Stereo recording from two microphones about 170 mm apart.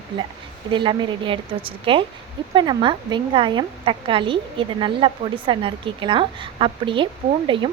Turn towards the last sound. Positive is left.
turn(degrees=-30)  # may be behind; listen again after turning